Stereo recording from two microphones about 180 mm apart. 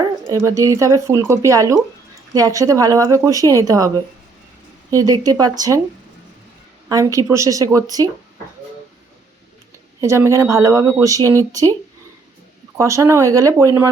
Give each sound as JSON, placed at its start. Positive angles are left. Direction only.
{"t": 0.3, "sound": "speech", "side_deg": -15}
{"t": 6.8, "sound": "speech", "side_deg": -20}
{"t": 10.0, "sound": "speech", "side_deg": -15}
{"t": 12.7, "sound": "speech", "side_deg": -15}